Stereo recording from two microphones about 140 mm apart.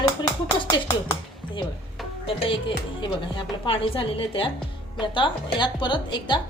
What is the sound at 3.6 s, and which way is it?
A woman's voice, 40° left (ahead or behind).